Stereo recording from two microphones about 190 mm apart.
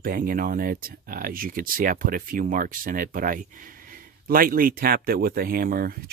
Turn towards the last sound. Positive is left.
turn(degrees=-50)  # may be behind; listen again after turning